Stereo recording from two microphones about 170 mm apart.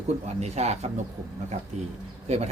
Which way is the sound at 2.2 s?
40° right (ahead or behind).